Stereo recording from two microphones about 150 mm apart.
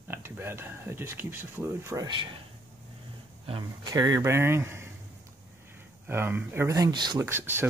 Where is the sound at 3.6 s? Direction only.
25° right (ahead or behind).